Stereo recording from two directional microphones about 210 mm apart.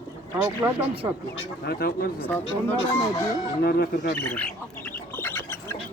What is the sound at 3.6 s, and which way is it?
Speech, 50° left (ahead or behind).